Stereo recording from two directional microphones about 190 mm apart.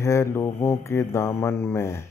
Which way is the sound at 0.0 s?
15° left (ahead or behind).